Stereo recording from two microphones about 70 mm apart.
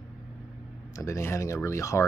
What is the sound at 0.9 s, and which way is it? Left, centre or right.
Speech, left.